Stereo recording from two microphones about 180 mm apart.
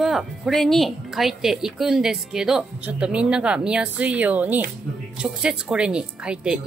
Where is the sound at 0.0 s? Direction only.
Centre (ahead or behind).